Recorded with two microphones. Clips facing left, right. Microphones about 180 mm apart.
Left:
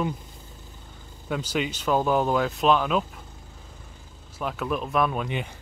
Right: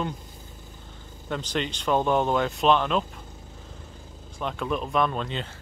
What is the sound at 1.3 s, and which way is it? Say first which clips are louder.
Speech: left 2 dB; 5° left (ahead or behind).